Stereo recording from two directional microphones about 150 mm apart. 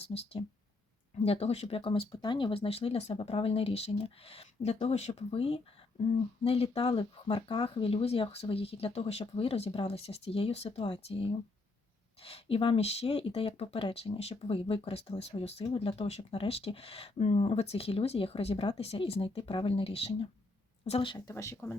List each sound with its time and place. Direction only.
0.0 s speech: 45° left (ahead or behind); by 21.6 s 20° left (ahead or behind)